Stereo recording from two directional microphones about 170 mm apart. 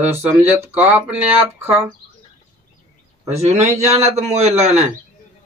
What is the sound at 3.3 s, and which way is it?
Speech, 40° right (ahead or behind).